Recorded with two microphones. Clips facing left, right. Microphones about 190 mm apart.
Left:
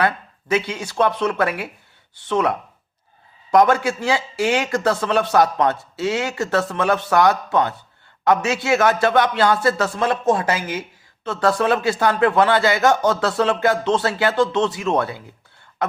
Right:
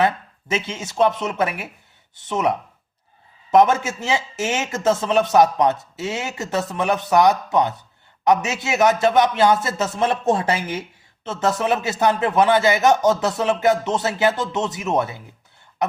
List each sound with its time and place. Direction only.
0.0 s a man's voice: 20° right (ahead or behind)